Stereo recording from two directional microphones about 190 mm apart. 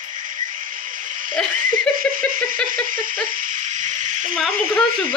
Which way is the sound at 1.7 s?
45° right (ahead or behind).